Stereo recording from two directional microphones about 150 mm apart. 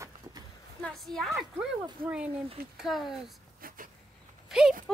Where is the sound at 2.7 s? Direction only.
Centre (ahead or behind).